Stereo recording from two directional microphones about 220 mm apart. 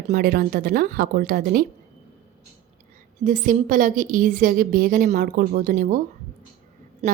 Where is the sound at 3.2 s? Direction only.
35° right (ahead or behind).